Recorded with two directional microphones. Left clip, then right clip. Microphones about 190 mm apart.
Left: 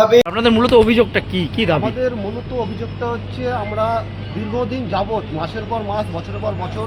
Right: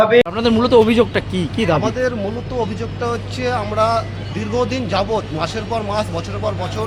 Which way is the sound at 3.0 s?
20° right (ahead or behind).